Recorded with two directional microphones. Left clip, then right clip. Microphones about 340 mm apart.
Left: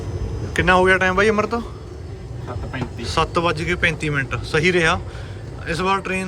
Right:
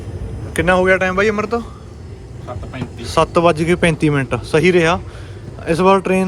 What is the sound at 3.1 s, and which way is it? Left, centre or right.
Speech, centre.